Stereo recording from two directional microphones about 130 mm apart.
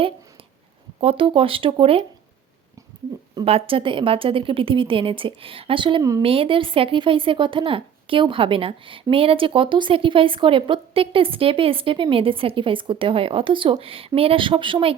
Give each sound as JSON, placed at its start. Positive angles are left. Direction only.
{"t": 1.0, "sound": "speech", "side_deg": -40}
{"t": 3.4, "sound": "speech", "side_deg": -45}
{"t": 6.0, "sound": "speech", "side_deg": -25}
{"t": 6.2, "sound": "speech", "side_deg": -45}